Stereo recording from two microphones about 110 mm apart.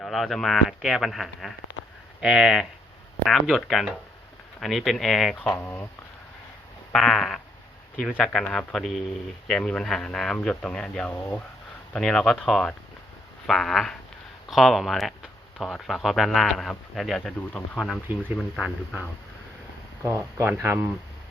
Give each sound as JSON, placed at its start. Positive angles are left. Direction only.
{"t": 0.0, "sound": "speech", "side_deg": 0}
{"t": 5.5, "sound": "speech", "side_deg": 20}
{"t": 6.9, "sound": "speech", "side_deg": 5}
{"t": 20.4, "sound": "speech", "side_deg": -20}